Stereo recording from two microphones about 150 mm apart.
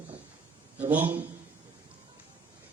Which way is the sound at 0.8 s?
10° right (ahead or behind).